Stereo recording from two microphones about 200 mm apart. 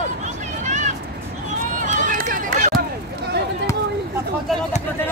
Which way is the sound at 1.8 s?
40° right (ahead or behind).